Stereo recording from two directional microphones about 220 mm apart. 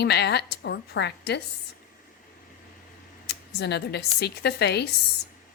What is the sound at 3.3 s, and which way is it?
Speech, 50° left (ahead or behind).